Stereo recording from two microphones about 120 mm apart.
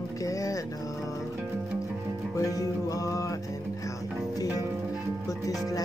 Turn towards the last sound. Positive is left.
turn(degrees=30)  # may be behind; listen again after turning